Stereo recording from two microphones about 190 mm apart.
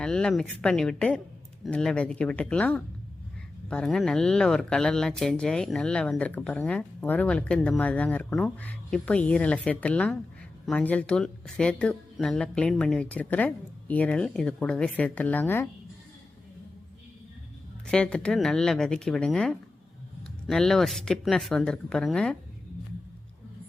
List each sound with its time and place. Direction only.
0.0 s speech: 5° left (ahead or behind)
17.9 s speech: 5° left (ahead or behind)